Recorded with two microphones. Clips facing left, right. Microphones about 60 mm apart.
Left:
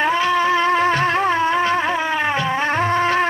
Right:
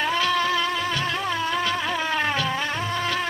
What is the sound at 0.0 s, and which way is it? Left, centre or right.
Music, left.